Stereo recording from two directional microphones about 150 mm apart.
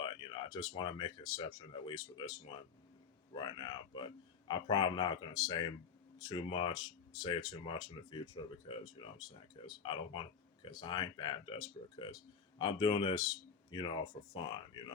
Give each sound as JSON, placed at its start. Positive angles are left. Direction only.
{"t": 0.0, "sound": "speech", "side_deg": 30}
{"t": 3.3, "sound": "a man's voice", "side_deg": 30}
{"t": 13.1, "sound": "a man's voice", "side_deg": 25}